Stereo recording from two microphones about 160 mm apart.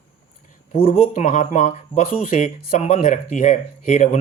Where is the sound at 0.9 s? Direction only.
55° left (ahead or behind).